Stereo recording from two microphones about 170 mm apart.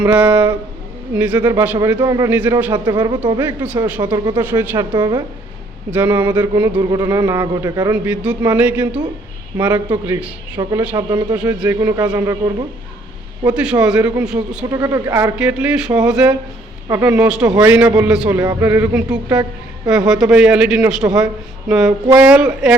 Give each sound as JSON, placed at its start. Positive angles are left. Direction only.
{"t": 0.0, "sound": "a man's voice", "side_deg": -10}
{"t": 2.7, "sound": "a man's voice", "side_deg": -25}
{"t": 3.6, "sound": "a man's voice", "side_deg": -10}
{"t": 4.0, "sound": "a man's voice", "side_deg": -25}
{"t": 4.4, "sound": "a man's voice", "side_deg": -10}
{"t": 4.9, "sound": "a man's voice", "side_deg": -30}
{"t": 5.9, "sound": "a man's voice", "side_deg": -10}
{"t": 6.9, "sound": "a man's voice", "side_deg": -20}
{"t": 7.9, "sound": "a man's voice", "side_deg": -5}
{"t": 10.6, "sound": "a man's voice", "side_deg": -20}
{"t": 11.3, "sound": "a man's voice", "side_deg": -10}
{"t": 11.8, "sound": "a man's voice", "side_deg": -20}
{"t": 13.5, "sound": "speech", "side_deg": -5}
{"t": 14.7, "sound": "a man's voice", "side_deg": -20}